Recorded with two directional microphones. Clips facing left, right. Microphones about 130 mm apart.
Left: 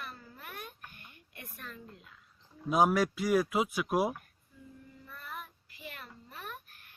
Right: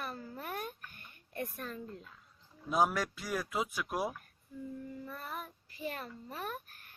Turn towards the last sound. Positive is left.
turn(degrees=-40)  # may be behind; listen again after turning